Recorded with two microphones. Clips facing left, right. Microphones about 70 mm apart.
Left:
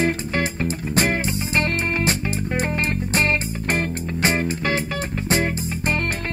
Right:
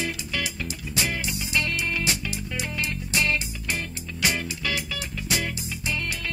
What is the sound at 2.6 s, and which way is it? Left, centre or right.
Music, left.